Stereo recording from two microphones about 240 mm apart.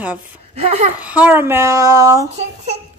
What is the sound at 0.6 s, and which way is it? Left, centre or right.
Speech, right.